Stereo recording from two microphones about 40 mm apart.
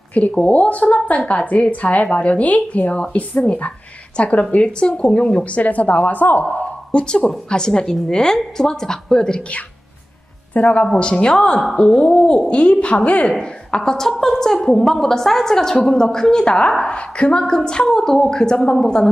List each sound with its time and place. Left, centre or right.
0.1 s a woman's voice: left
1.2 s a woman's voice: left
7.0 s a woman's voice: left
10.5 s a woman's voice: left
10.9 s a woman's voice: left
13.9 s a woman's voice: centre